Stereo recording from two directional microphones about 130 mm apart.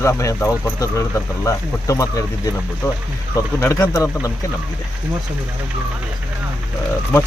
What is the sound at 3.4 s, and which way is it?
Speech, 25° left (ahead or behind).